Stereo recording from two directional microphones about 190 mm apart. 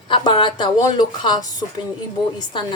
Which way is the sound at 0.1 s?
25° left (ahead or behind).